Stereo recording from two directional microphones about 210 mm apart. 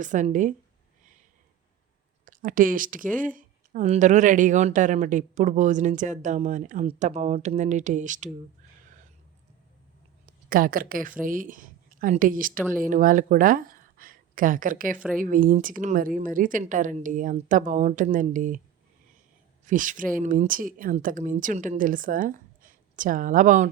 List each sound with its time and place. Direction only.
0.0 s speech: 35° right (ahead or behind)
2.2 s speech: 40° right (ahead or behind)
10.2 s a woman's voice: 40° right (ahead or behind)
14.9 s speech: 5° right (ahead or behind)
15.2 s speech: 40° right (ahead or behind)
19.6 s speech: 40° right (ahead or behind)